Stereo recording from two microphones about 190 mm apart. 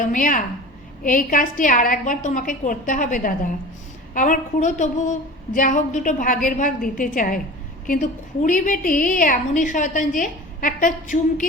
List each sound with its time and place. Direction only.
0.0 s a woman's voice: 45° left (ahead or behind)